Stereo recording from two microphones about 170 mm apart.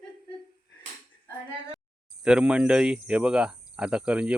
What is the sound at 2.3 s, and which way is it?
Cricket, 5° right (ahead or behind).